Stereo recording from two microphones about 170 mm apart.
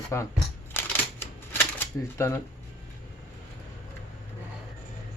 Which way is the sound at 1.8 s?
15° left (ahead or behind).